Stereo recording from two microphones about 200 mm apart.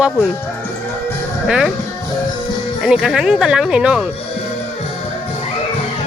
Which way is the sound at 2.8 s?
Centre (ahead or behind).